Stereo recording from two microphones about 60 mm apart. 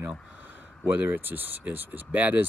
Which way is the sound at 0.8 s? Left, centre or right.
Right.